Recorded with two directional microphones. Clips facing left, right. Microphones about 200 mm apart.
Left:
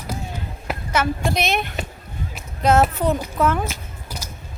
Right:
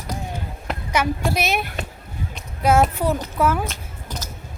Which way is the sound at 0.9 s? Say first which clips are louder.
Even; 10° right (ahead or behind).